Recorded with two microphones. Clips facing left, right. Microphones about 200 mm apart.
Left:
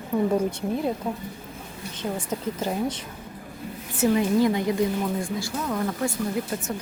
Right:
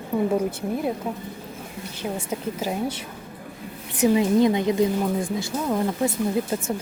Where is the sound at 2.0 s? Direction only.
10° right (ahead or behind).